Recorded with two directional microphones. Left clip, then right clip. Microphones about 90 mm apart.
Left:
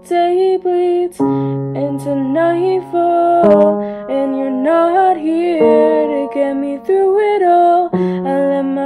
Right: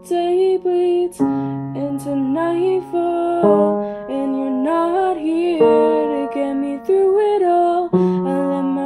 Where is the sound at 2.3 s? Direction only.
35° left (ahead or behind).